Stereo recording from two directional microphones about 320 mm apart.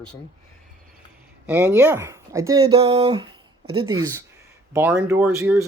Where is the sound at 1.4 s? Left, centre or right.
Centre.